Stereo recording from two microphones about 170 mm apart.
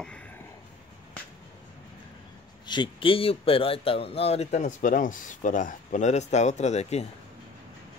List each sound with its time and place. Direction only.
2.6 s speech: 25° left (ahead or behind)